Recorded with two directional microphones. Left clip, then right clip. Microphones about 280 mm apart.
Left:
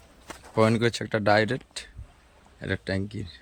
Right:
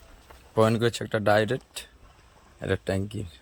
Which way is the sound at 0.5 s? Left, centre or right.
Centre.